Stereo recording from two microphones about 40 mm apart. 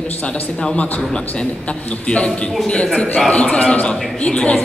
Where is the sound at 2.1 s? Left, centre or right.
Left.